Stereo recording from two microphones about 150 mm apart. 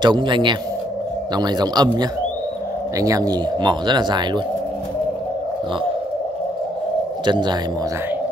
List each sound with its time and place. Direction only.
0.0 s a man's voice: 30° right (ahead or behind)
7.2 s a man's voice: 30° right (ahead or behind)